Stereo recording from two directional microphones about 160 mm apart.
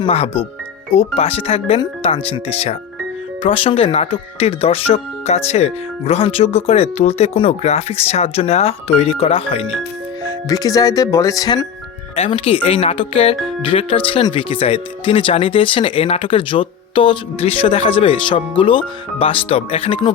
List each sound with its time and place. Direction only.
0.1 s speech: 40° left (ahead or behind)
10.5 s speech: 20° left (ahead or behind)
12.1 s speech: 35° left (ahead or behind)